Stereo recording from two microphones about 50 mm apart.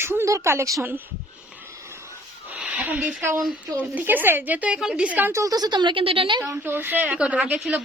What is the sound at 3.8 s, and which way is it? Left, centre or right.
Speech, right.